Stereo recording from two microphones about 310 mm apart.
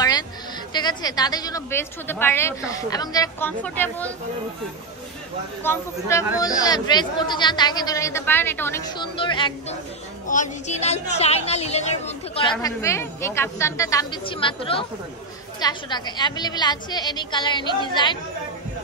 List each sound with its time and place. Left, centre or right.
0.7 s a woman's voice: centre
5.6 s a woman's voice: centre